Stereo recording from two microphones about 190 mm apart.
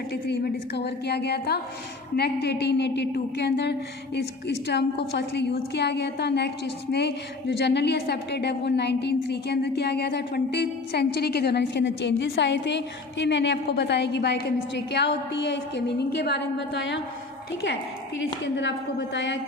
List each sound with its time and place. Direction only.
0.1 s a woman's voice: 60° left (ahead or behind)
18.4 s a woman's voice: 65° left (ahead or behind)